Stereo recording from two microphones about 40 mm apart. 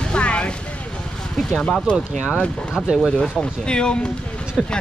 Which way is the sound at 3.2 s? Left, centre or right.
Left.